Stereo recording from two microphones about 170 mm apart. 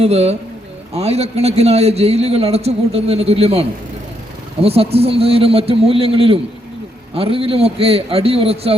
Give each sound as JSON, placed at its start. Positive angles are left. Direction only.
{"t": 0.0, "sound": "a man's voice", "side_deg": -40}